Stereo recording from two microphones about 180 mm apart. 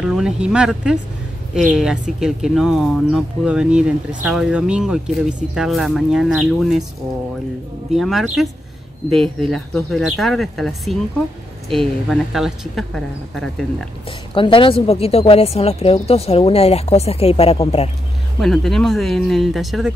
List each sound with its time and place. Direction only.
0.0 s speech: 5° right (ahead or behind)
7.9 s speech: centre (ahead or behind)
11.7 s speech: centre (ahead or behind)
14.3 s speech: 30° left (ahead or behind)
18.4 s speech: centre (ahead or behind)